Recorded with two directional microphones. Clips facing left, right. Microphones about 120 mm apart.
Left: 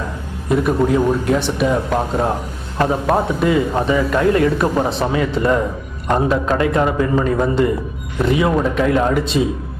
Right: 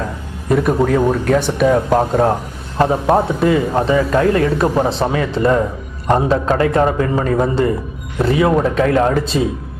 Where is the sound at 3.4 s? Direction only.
30° right (ahead or behind).